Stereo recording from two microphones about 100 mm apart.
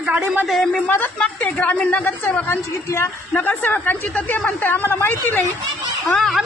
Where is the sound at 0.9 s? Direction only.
15° left (ahead or behind).